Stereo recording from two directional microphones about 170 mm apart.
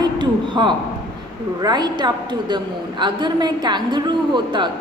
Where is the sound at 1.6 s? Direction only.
25° right (ahead or behind).